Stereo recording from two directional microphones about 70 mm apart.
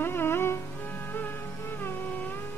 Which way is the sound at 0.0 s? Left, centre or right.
Left.